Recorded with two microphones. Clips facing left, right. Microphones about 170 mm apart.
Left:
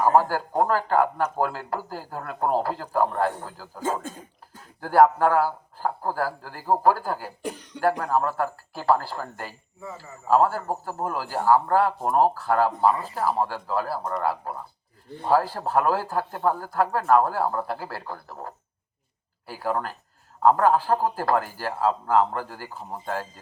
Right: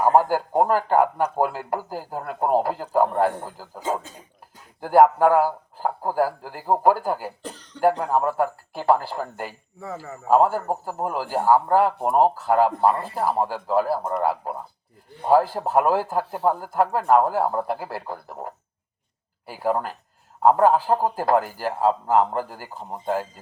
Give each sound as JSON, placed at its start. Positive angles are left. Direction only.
{"t": 0.0, "sound": "speech", "side_deg": -20}
{"t": 3.8, "sound": "speech", "side_deg": 50}
{"t": 4.8, "sound": "speech", "side_deg": -15}
{"t": 7.4, "sound": "cough", "side_deg": 10}
{"t": 8.0, "sound": "speech", "side_deg": -15}
{"t": 9.8, "sound": "speech", "side_deg": -80}
{"t": 10.2, "sound": "speech", "side_deg": -20}